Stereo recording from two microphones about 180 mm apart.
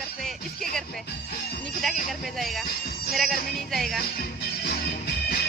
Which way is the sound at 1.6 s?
Centre (ahead or behind).